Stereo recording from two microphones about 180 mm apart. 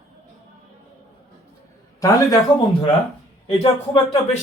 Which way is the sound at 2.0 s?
20° left (ahead or behind).